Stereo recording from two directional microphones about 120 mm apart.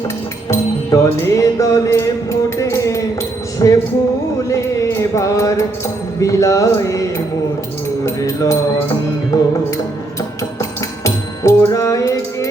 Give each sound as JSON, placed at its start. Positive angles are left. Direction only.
{"t": 0.4, "sound": "music", "side_deg": 25}
{"t": 4.4, "sound": "mantra", "side_deg": 25}
{"t": 8.0, "sound": "music", "side_deg": 25}